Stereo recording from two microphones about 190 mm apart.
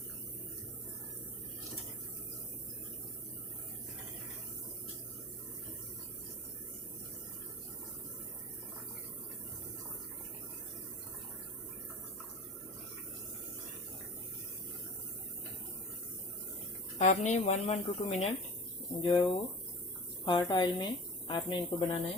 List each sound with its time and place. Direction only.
17.0 s a woman's voice: 40° left (ahead or behind); by 21.9 s 25° left (ahead or behind)